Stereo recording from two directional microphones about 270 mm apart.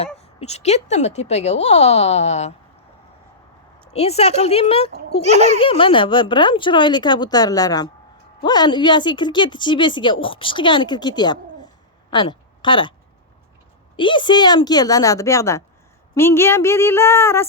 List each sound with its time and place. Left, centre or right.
0.2 s speech: left
3.9 s speech: left
5.2 s a child's voice: right
5.5 s a woman's voice: centre
13.9 s speech: centre